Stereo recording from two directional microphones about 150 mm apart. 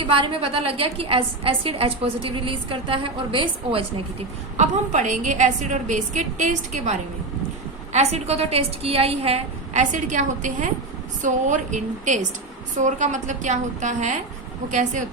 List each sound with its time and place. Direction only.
0.1 s a woman's voice: 35° right (ahead or behind)
4.5 s a woman's voice: 50° right (ahead or behind)
7.9 s a woman's voice: 45° right (ahead or behind)